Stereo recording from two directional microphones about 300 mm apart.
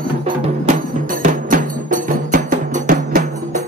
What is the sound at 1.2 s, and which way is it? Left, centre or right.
Music, right.